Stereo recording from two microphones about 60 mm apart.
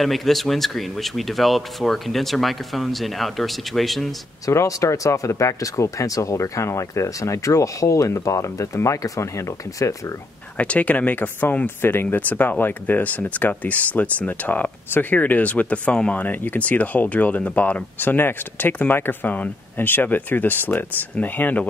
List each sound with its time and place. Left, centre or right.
0.0 s speech: centre
4.5 s speech: left
10.6 s speech: left